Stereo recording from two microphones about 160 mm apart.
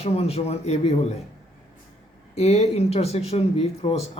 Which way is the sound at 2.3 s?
45° left (ahead or behind).